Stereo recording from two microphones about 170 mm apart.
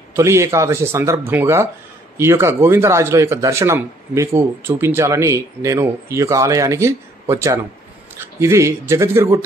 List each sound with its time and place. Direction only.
0.1 s a man's voice: 15° right (ahead or behind)